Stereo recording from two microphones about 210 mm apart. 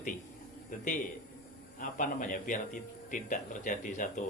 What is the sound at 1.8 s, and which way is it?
Speech, 40° left (ahead or behind).